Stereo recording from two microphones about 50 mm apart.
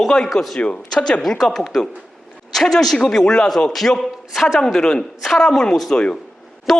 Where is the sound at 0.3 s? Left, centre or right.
Centre.